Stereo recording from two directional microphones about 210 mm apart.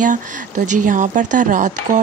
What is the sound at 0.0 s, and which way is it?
Speech, 40° right (ahead or behind).